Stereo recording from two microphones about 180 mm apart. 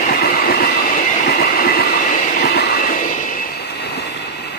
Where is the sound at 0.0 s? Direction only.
60° left (ahead or behind).